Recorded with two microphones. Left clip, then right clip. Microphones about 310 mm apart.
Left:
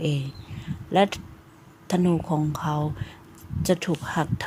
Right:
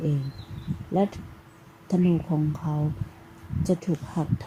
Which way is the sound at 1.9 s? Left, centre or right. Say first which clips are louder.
Left 2 dB; left.